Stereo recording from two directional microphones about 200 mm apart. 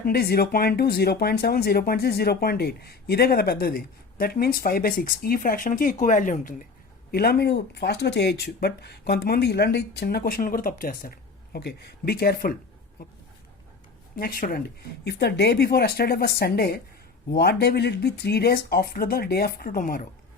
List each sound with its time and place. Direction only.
0.0 s speech: 50° left (ahead or behind)
14.2 s speech: 45° left (ahead or behind)